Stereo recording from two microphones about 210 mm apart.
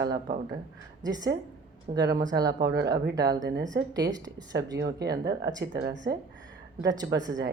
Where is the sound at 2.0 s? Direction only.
50° right (ahead or behind).